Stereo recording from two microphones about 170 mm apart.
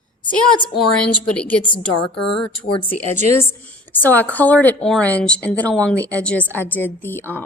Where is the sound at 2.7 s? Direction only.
30° left (ahead or behind).